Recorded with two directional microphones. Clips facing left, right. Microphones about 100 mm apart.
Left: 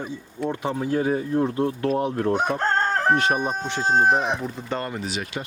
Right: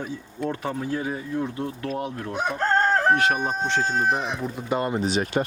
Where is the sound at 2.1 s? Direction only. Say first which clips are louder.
Left 6 dB; 45° left (ahead or behind).